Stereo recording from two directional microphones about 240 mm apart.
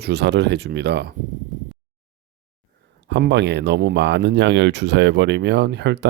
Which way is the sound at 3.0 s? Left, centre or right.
Right.